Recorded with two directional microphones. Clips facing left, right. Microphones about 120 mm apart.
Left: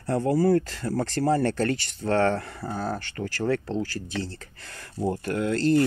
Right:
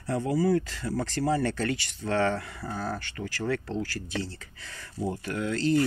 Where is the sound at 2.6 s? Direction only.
25° left (ahead or behind).